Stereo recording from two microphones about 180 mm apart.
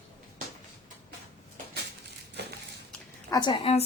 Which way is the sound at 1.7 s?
65° right (ahead or behind).